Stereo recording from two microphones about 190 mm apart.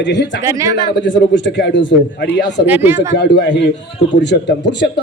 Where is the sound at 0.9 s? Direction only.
70° left (ahead or behind).